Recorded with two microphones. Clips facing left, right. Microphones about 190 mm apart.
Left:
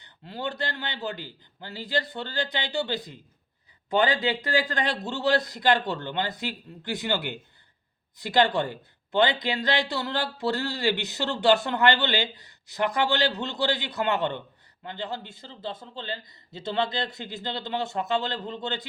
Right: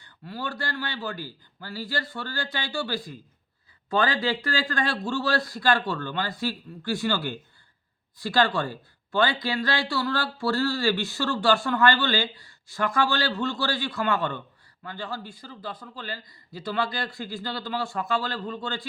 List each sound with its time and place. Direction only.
0.0 s speech: 20° left (ahead or behind)